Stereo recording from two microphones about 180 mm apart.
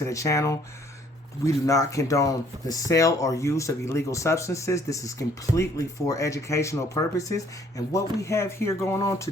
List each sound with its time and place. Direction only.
0.0 s speech: 15° left (ahead or behind)